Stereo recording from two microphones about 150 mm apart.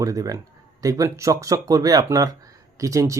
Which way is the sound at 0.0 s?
25° right (ahead or behind).